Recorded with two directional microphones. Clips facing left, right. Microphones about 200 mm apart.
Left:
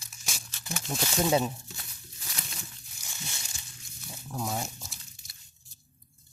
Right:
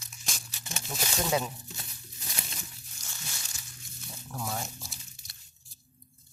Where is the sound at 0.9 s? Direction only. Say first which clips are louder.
Left 4 dB; 20° left (ahead or behind).